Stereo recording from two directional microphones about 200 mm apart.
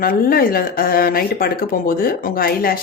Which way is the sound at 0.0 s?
45° left (ahead or behind).